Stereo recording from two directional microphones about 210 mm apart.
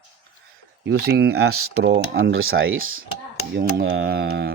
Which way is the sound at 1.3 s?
90° right.